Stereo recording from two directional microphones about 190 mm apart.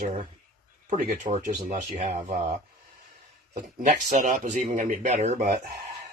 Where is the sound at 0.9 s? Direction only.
40° right (ahead or behind).